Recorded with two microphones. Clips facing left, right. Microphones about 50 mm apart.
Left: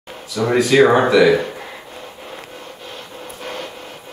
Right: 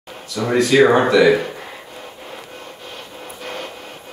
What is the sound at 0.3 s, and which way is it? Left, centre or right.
Speech, centre.